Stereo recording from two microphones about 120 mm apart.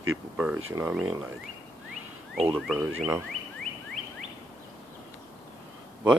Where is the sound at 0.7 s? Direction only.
25° right (ahead or behind).